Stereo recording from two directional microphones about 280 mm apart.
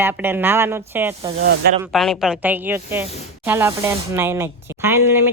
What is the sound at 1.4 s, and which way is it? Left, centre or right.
Speech, right.